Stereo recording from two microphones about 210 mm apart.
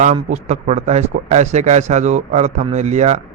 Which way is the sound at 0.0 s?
35° right (ahead or behind).